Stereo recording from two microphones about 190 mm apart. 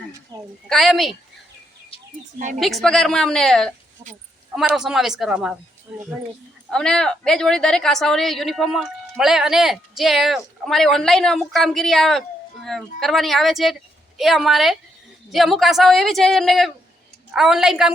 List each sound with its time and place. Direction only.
0.3 s speech: 20° right (ahead or behind)
0.7 s a woman's voice: centre (ahead or behind)
2.6 s a woman's voice: centre (ahead or behind)